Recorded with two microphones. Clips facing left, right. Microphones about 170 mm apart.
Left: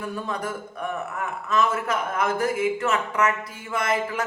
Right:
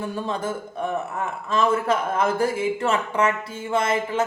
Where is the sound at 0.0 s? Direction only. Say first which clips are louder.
Right 3 dB; 30° right (ahead or behind).